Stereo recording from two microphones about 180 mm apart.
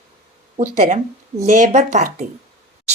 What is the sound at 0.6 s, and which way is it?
A woman's voice, 45° right (ahead or behind).